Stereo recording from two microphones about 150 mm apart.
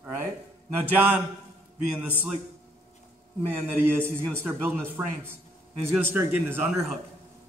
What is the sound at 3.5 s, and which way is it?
A man's voice, 15° right (ahead or behind).